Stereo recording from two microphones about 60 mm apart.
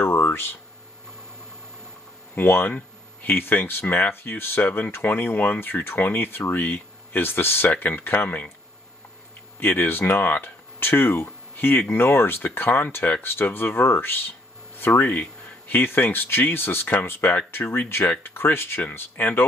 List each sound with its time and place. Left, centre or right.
0.0 s a sound: left
2.3 s speech: left
9.6 s speech: left